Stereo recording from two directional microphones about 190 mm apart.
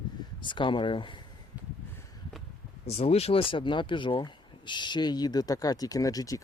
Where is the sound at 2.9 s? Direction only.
35° left (ahead or behind).